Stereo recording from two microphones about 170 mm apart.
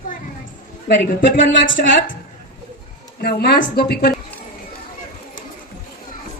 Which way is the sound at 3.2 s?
65° left (ahead or behind).